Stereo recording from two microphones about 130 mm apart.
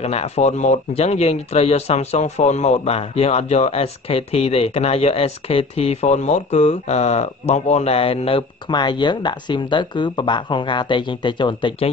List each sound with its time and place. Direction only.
0.0 s speech: 55° left (ahead or behind)